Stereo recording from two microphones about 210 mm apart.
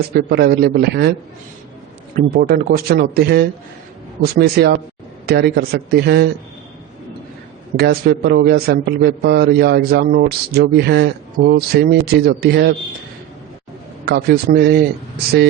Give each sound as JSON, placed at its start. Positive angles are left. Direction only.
{"t": 0.1, "sound": "a man's voice", "side_deg": -45}
{"t": 2.1, "sound": "a man's voice", "side_deg": -45}
{"t": 7.8, "sound": "a man's voice", "side_deg": -45}
{"t": 14.0, "sound": "a man's voice", "side_deg": -50}